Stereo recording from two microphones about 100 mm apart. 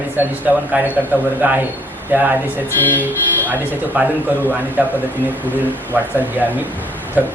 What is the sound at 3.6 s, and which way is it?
A man's voice, 20° right (ahead or behind).